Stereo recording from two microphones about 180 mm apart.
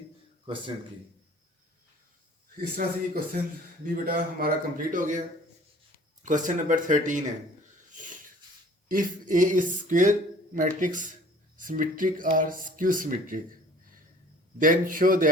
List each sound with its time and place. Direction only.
0.4 s a man's voice: 25° right (ahead or behind)
2.8 s speech: 50° right (ahead or behind)
6.2 s speech: 45° right (ahead or behind)
7.9 s wheeze: 45° right (ahead or behind)
8.9 s speech: 50° right (ahead or behind)
14.6 s speech: 50° right (ahead or behind)